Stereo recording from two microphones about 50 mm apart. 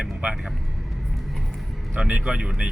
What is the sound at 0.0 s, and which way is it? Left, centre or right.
Vehicle, right.